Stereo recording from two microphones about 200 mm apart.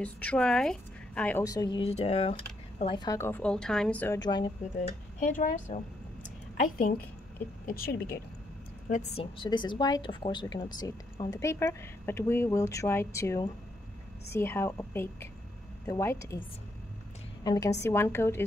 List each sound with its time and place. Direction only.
0.0 s a woman's voice: 5° left (ahead or behind)
4.2 s a woman's voice: 20° left (ahead or behind)
4.7 s speech: 40° left (ahead or behind)
6.2 s a sound: 40° left (ahead or behind)
7.6 s a woman's voice: 50° left (ahead or behind)
8.8 s a woman's voice: 35° left (ahead or behind); by 16.3 s 15° left (ahead or behind)
17.4 s a woman's voice: 20° left (ahead or behind)